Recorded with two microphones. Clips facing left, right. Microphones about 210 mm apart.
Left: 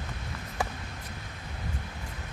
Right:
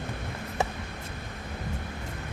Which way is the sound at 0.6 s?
25° right (ahead or behind).